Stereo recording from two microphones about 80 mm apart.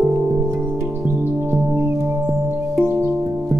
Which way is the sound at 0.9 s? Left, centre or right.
Right.